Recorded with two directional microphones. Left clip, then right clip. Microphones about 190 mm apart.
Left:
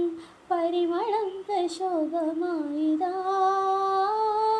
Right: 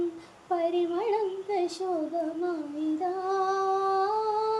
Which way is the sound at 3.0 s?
20° left (ahead or behind).